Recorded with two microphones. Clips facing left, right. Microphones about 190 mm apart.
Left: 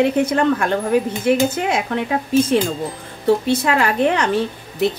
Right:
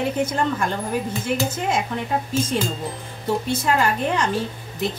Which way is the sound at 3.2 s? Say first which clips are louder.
Left 6 dB; 70° left (ahead or behind).